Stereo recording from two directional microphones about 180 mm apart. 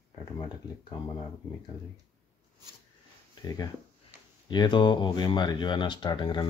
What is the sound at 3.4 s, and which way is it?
Speech, 20° left (ahead or behind).